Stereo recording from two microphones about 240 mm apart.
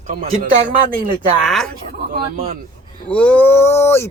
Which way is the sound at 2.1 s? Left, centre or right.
Right.